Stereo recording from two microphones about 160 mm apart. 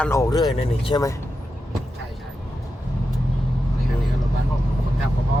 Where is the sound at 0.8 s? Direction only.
25° left (ahead or behind).